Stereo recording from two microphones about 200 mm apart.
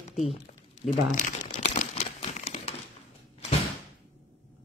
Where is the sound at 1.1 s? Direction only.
40° left (ahead or behind).